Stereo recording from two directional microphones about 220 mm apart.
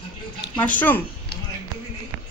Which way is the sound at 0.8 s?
10° left (ahead or behind).